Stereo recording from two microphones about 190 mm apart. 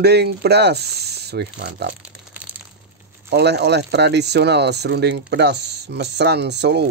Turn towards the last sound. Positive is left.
turn(degrees=-60)  # may be behind; listen again after turning